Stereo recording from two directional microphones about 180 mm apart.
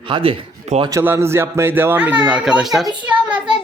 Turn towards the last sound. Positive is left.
turn(degrees=-5)  # may be behind; listen again after turning